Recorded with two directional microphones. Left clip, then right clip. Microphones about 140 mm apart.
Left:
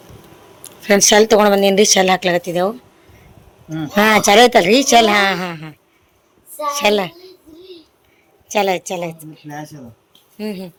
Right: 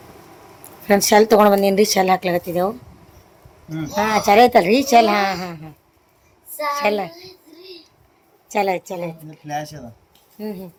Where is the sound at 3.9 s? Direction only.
35° left (ahead or behind).